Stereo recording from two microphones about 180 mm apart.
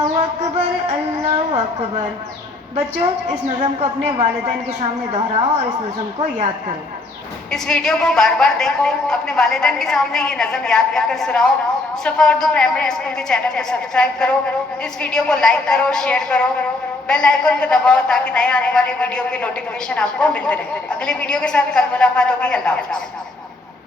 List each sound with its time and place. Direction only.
0.2 s music: 35° right (ahead or behind)
3.6 s a woman's voice: 35° right (ahead or behind)
7.5 s a woman's voice: 5° left (ahead or behind)